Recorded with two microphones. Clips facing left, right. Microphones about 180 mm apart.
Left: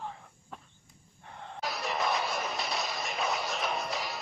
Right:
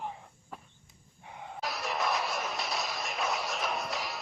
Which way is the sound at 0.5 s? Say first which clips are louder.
Right 1 dB; 5° right (ahead or behind).